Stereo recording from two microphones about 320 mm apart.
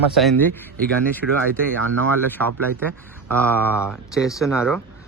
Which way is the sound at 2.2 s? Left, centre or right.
Centre.